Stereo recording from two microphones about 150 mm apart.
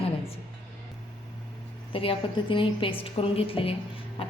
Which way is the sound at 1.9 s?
35° left (ahead or behind).